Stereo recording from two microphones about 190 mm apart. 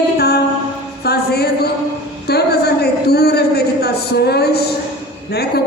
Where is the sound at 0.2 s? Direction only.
60° left (ahead or behind).